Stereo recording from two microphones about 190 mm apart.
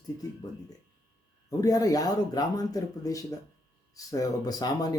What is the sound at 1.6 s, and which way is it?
Speech, 20° left (ahead or behind).